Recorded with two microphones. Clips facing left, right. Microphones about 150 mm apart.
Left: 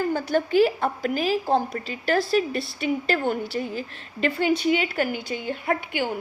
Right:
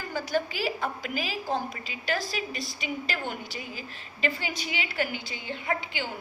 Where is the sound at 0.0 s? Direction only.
55° left (ahead or behind).